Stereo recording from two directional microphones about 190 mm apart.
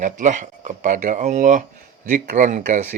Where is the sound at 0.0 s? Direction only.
40° right (ahead or behind).